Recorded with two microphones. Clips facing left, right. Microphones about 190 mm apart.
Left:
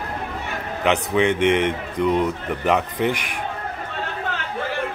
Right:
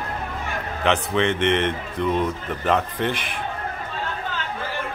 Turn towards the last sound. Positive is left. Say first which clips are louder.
# left 1 dB
turn(degrees=70)  # may be behind; listen again after turning